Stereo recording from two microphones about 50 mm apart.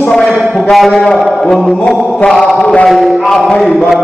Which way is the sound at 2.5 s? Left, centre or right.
Left.